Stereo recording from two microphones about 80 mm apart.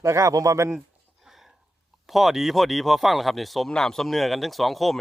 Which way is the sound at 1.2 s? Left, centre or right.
Centre.